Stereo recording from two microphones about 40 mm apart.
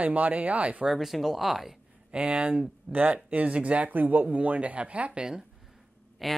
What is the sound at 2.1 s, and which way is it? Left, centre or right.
Speech, right.